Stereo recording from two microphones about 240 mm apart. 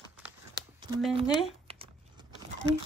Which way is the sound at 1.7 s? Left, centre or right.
Right.